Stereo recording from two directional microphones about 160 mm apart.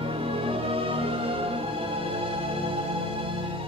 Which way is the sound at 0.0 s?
35° right (ahead or behind).